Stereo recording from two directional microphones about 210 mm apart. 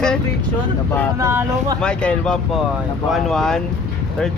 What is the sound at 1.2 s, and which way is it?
Speech, 15° right (ahead or behind).